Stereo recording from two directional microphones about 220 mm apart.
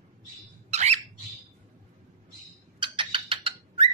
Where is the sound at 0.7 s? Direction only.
30° right (ahead or behind).